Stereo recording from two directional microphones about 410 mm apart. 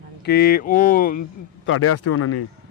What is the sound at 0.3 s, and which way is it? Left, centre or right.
Speech, left.